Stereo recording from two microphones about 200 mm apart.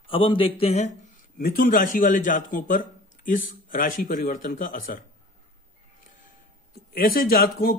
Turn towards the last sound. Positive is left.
turn(degrees=45)  # may be behind; listen again after turning